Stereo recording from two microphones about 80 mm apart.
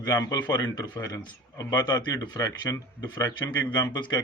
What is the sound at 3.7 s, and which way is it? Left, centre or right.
Speech, left.